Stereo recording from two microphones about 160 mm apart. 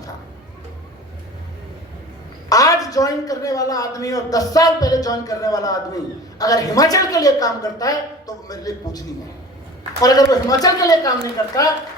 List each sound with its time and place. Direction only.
2.5 s a man's voice: 20° left (ahead or behind)